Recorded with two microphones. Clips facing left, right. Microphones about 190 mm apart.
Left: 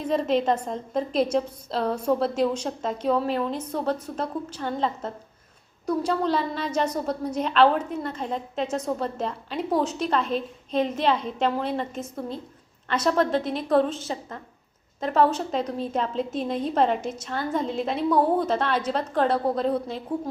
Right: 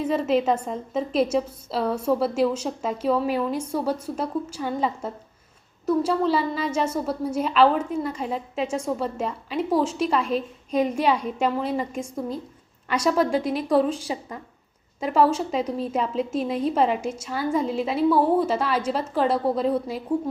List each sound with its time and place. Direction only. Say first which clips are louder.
0.0 s a woman's voice: right 1 dB; 5° right (ahead or behind)